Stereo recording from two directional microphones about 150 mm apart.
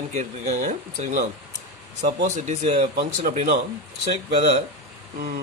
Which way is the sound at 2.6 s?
40° right (ahead or behind).